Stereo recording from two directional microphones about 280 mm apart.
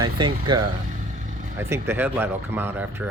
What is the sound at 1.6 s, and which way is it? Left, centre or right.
Speech, centre.